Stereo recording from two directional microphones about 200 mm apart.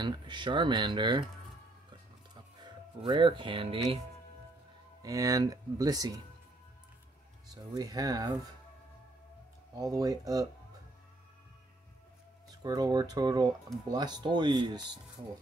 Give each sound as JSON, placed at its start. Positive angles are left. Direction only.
{"t": 0.0, "sound": "speech", "side_deg": -20}
{"t": 1.9, "sound": "music", "side_deg": -20}
{"t": 5.0, "sound": "speech", "side_deg": -15}
{"t": 7.7, "sound": "speech", "side_deg": -20}
{"t": 9.8, "sound": "speech", "side_deg": -15}
{"t": 12.4, "sound": "speech", "side_deg": -20}